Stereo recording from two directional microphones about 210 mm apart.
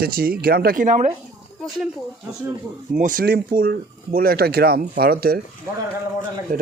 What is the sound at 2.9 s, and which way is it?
Speech, 40° right (ahead or behind).